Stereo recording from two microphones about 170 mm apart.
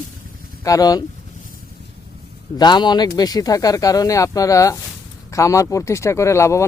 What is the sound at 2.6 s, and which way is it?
Speech, 25° left (ahead or behind).